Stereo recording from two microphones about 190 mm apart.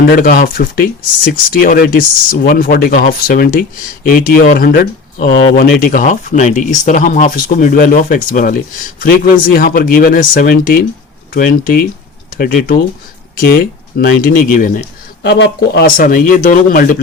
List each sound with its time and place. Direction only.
0.2 s speech: 50° left (ahead or behind)
15.2 s speech: 60° left (ahead or behind)
16.0 s speech: 45° left (ahead or behind)